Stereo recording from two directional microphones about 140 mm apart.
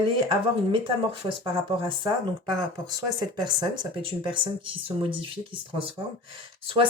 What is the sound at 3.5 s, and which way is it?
Speech, 30° right (ahead or behind).